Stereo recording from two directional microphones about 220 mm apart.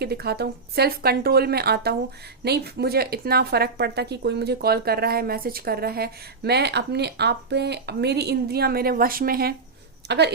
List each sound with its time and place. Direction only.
0.0 s speech: 45° right (ahead or behind)